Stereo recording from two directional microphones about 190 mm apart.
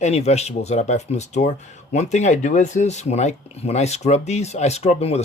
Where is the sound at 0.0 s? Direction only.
35° left (ahead or behind).